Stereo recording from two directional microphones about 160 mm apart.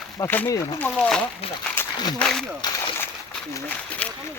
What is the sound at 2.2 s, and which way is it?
Speech, 5° left (ahead or behind).